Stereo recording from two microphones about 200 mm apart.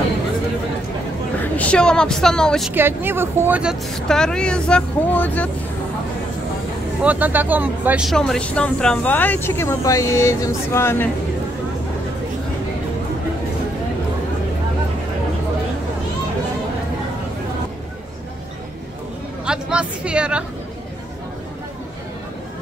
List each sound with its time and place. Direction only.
1.4 s speech: 5° left (ahead or behind)
2.7 s speech: 10° right (ahead or behind); by 5.5 s 10° left (ahead or behind)
7.0 s speech: 10° right (ahead or behind); by 11.1 s 10° left (ahead or behind)
19.4 s a sound: 5° right (ahead or behind)